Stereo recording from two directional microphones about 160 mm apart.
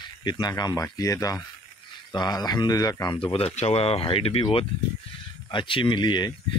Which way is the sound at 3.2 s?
35° left (ahead or behind).